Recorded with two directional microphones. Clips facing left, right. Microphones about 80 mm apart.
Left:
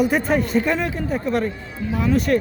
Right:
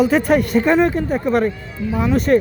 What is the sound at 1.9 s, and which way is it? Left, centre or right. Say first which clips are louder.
Speech: right 2 dB; centre.